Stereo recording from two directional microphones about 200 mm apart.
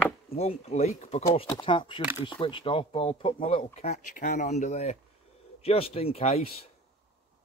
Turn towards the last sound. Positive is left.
turn(degrees=30)  # may be behind; listen again after turning